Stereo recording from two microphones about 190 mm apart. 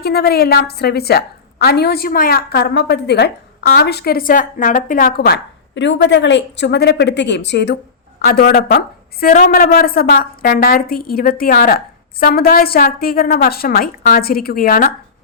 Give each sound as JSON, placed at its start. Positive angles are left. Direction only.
{"t": 0.0, "sound": "a woman's voice", "side_deg": 55}
{"t": 8.2, "sound": "a woman's voice", "side_deg": 50}